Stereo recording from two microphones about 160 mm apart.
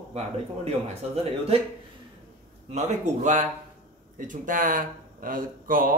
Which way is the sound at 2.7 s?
45° right (ahead or behind).